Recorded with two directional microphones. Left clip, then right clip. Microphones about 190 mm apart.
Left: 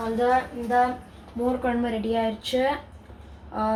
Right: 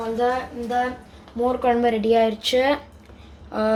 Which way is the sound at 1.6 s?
55° right (ahead or behind).